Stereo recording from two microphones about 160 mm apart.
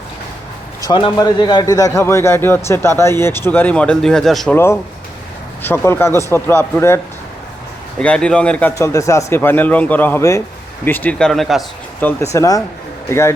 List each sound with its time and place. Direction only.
0.8 s a man's voice: 30° left (ahead or behind); by 4.5 s centre (ahead or behind)
4.5 s a man's voice: 15° left (ahead or behind)
11.9 s a man's voice: 15° left (ahead or behind)